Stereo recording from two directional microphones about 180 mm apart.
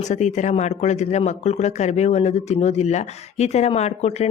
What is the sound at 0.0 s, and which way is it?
Speech, 40° left (ahead or behind).